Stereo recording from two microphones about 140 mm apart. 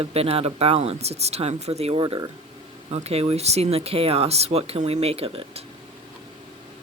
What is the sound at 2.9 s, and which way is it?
Speech, 45° right (ahead or behind).